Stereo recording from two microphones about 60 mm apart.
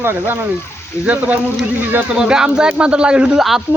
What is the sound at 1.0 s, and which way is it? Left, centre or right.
A man's voice, right.